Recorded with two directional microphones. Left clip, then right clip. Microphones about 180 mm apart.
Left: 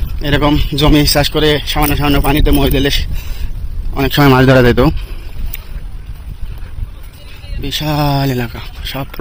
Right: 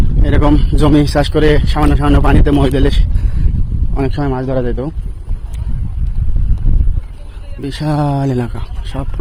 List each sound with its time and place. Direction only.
0.3 s speech: 10° right (ahead or behind)
0.7 s a man's voice: 25° right (ahead or behind)
2.7 s speech: 15° right (ahead or behind)
3.9 s speech: 5° right (ahead or behind)
4.3 s speech: 35° left (ahead or behind)
4.6 s speech: 20° left (ahead or behind)
7.6 s a man's voice: 25° right (ahead or behind)
7.9 s speech: 10° right (ahead or behind)